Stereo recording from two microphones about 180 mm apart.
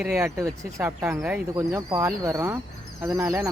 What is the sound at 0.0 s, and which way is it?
Speech, 10° right (ahead or behind).